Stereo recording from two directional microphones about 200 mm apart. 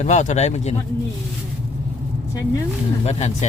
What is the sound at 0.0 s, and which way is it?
Speech, 35° left (ahead or behind).